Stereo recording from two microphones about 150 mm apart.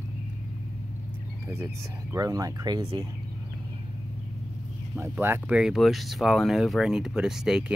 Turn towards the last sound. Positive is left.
turn(degrees=-5)  # may be behind; listen again after turning